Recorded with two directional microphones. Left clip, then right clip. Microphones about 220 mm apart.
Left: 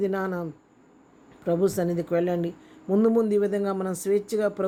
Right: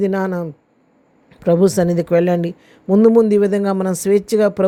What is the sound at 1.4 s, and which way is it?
Speech, 35° right (ahead or behind).